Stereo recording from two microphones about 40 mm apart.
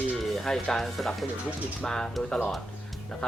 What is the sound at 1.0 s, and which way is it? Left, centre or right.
Speech, centre.